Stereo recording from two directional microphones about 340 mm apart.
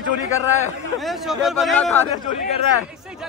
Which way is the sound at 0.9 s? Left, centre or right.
Centre.